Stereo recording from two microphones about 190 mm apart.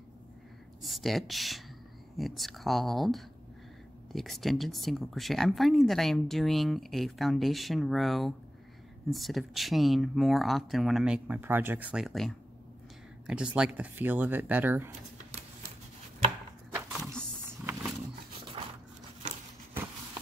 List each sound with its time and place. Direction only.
0.8 s speech: centre (ahead or behind)
16.7 s a sound: 10° right (ahead or behind)
18.6 s dog: 30° right (ahead or behind)